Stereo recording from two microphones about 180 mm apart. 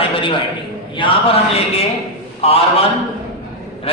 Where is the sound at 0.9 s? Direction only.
30° left (ahead or behind).